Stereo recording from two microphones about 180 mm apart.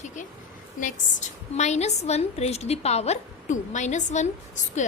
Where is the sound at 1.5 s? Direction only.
40° left (ahead or behind).